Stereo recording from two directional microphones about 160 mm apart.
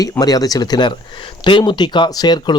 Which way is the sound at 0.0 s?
25° left (ahead or behind).